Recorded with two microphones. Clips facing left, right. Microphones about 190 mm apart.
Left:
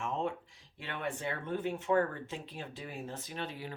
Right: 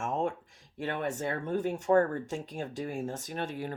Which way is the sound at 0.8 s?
45° right (ahead or behind).